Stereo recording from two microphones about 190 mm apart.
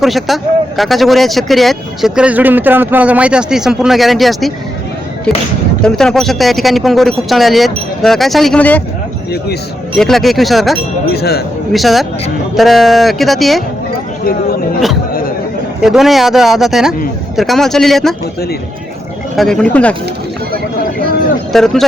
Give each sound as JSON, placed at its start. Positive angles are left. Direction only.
{"t": 0.0, "sound": "speech", "side_deg": 0}
{"t": 5.8, "sound": "speech", "side_deg": 5}
{"t": 10.0, "sound": "speech", "side_deg": 0}
{"t": 11.1, "sound": "speech", "side_deg": 55}
{"t": 11.7, "sound": "speech", "side_deg": 0}
{"t": 15.8, "sound": "speech", "side_deg": 0}
{"t": 19.4, "sound": "speech", "side_deg": 5}
{"t": 21.5, "sound": "speech", "side_deg": 0}